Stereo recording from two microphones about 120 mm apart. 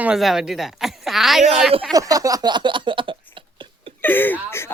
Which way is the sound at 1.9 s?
30° right (ahead or behind).